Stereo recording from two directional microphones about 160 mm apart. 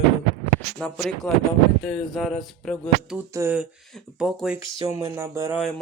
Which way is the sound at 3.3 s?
15° right (ahead or behind).